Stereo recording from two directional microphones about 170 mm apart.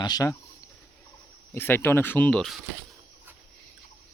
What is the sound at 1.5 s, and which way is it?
Speech, 15° left (ahead or behind).